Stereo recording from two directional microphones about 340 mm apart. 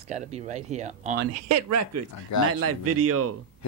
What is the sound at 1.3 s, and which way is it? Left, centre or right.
Speech, right.